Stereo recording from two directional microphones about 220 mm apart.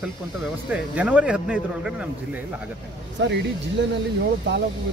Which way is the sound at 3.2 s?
50° right (ahead or behind).